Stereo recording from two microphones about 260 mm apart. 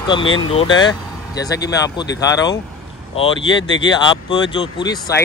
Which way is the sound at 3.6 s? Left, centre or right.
Left.